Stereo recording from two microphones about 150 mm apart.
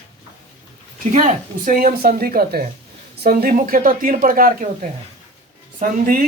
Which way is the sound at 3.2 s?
75° right (ahead or behind).